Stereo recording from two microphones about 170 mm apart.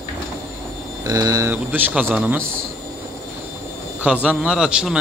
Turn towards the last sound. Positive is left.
turn(degrees=-5)  # may be behind; listen again after turning